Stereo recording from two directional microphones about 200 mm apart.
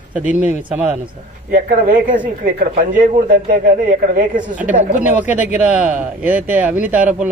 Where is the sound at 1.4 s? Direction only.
45° right (ahead or behind).